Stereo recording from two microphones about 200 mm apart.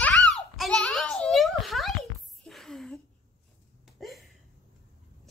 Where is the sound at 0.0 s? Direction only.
5° left (ahead or behind).